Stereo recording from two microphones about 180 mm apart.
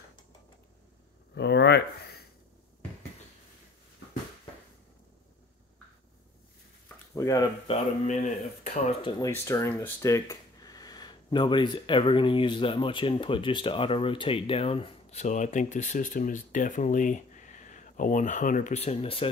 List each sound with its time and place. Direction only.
1.3 s a sound: 70° left (ahead or behind)
7.2 s speech: 20° left (ahead or behind)
7.6 s speech: 40° left (ahead or behind)
9.2 s speech: 15° left (ahead or behind); by 19.2 s 35° left (ahead or behind)